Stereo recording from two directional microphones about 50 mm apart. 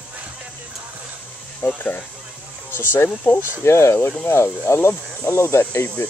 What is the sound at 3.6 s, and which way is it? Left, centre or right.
Speech, left.